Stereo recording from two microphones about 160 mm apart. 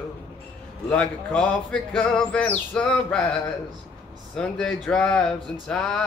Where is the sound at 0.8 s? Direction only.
10° left (ahead or behind).